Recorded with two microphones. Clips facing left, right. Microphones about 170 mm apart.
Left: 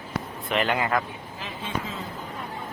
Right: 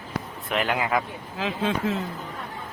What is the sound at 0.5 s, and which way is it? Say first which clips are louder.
Speech: even; centre (ahead or behind).